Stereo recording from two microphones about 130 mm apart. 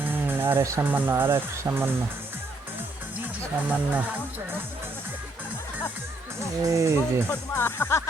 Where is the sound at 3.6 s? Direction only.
15° right (ahead or behind).